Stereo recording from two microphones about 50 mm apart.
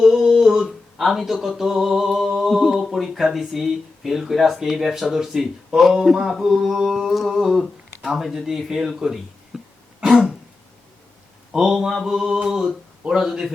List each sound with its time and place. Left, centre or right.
0.0 s humming: centre
0.9 s a sound: centre
7.5 s speech: centre
10.0 s throat clearing: centre
11.5 s speech: centre